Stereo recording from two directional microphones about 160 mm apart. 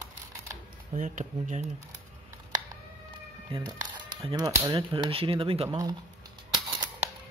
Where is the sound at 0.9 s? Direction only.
50° right (ahead or behind).